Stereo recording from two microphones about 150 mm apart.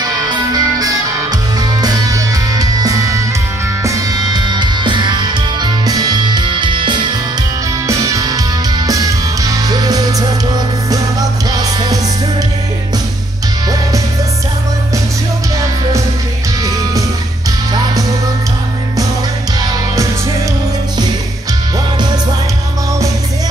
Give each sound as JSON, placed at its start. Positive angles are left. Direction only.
{"t": 0.3, "sound": "music", "side_deg": -25}